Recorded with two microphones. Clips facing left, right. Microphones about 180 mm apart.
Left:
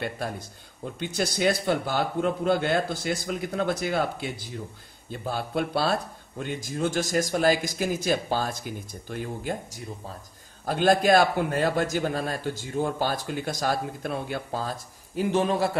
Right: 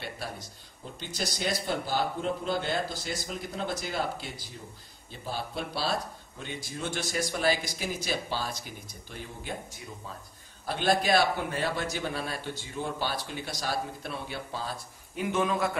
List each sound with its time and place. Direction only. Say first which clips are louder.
0.9 s a man's voice: left 7 dB; 60° left (ahead or behind)
10.6 s a man's voice: left 6 dB; 45° left (ahead or behind)